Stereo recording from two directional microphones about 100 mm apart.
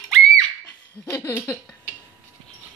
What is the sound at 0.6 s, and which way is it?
Laughter, 30° left (ahead or behind).